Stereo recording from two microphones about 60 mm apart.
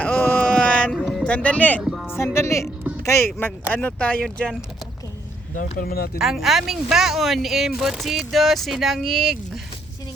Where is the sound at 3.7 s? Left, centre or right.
Left.